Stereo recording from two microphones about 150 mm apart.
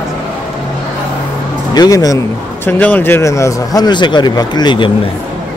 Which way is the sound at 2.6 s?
10° left (ahead or behind).